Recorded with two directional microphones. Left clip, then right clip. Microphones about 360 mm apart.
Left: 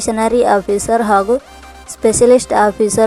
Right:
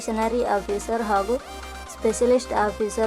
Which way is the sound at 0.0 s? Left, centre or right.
Centre.